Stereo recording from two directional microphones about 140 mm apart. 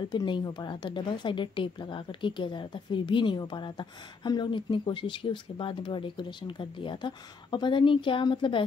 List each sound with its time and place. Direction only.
0.1 s speech: 30° left (ahead or behind)